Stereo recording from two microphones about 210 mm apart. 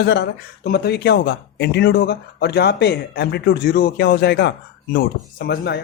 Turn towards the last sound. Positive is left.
turn(degrees=50)  # may be behind; listen again after turning